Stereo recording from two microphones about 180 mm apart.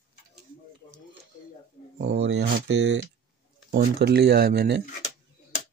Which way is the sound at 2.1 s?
85° right.